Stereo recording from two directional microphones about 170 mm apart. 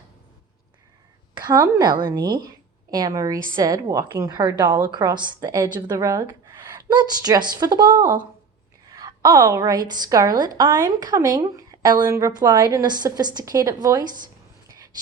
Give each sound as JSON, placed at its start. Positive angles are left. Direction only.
{"t": 1.4, "sound": "a woman's voice", "side_deg": -25}